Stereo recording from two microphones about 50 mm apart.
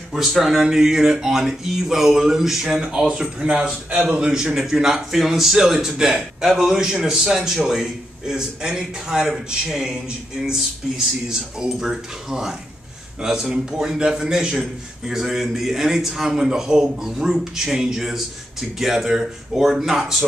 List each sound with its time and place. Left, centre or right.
0.1 s a man's voice: centre